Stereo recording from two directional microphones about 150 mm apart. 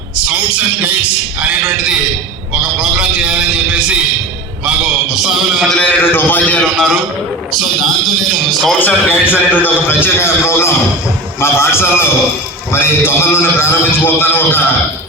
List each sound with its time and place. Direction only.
0.3 s a man's voice: 10° right (ahead or behind)
5.1 s a man's voice: 5° right (ahead or behind)
8.8 s a man's voice: 15° left (ahead or behind)